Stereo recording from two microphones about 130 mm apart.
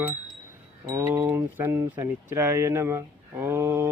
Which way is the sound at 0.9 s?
20° right (ahead or behind).